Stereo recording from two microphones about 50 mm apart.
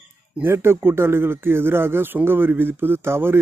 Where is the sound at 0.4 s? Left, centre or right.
Right.